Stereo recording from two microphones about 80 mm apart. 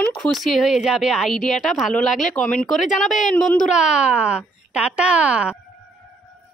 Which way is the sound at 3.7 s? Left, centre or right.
Centre.